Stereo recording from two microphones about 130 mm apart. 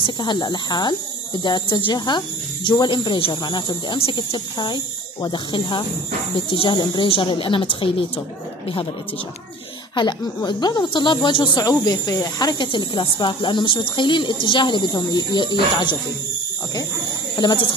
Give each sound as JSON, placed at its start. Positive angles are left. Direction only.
{"t": 0.0, "sound": "speech", "side_deg": 35}
{"t": 9.9, "sound": "speech", "side_deg": 35}
{"t": 17.4, "sound": "speech", "side_deg": 35}